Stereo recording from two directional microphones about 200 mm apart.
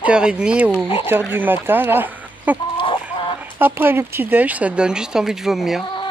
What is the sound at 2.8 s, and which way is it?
Chicken, 25° left (ahead or behind).